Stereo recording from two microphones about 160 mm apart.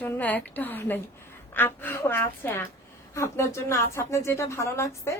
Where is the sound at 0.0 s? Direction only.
10° left (ahead or behind).